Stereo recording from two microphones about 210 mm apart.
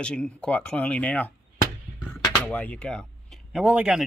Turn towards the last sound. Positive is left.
turn(degrees=-5)  # may be behind; listen again after turning